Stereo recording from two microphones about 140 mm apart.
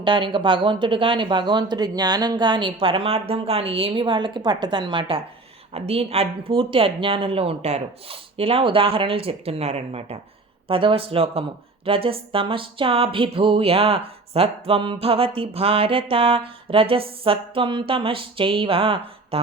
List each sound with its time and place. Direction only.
0.0 s speech: 35° right (ahead or behind)